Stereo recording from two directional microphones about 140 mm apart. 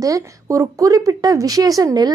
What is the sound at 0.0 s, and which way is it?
A woman's voice, 25° right (ahead or behind).